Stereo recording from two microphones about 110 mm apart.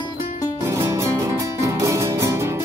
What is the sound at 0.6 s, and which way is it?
Music, 25° right (ahead or behind).